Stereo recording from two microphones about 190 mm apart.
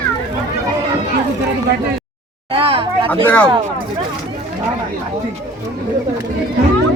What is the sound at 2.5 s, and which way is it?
Speech, 30° right (ahead or behind).